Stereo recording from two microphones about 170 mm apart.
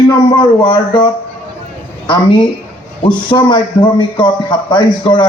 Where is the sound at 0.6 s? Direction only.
30° left (ahead or behind).